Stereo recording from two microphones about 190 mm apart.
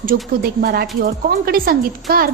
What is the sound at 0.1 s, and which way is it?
A woman's voice, 50° right (ahead or behind).